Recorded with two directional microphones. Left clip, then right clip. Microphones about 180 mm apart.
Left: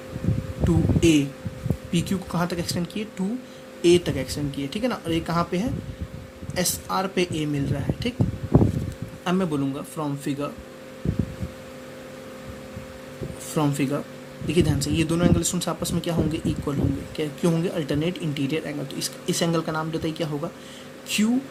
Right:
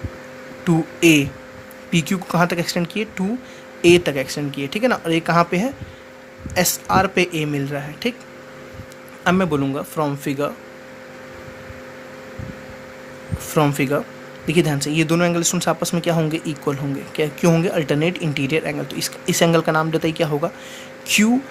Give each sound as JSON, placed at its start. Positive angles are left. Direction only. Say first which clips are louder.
{"t": 0.6, "sound": "speech", "louder": "right 5 dB", "side_deg": -35}
{"t": 9.2, "sound": "speech", "louder": "right 7 dB", "side_deg": -35}
{"t": 13.5, "sound": "speech", "louder": "right 7 dB", "side_deg": -35}